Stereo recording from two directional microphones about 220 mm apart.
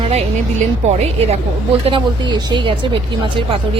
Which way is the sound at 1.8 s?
20° right (ahead or behind).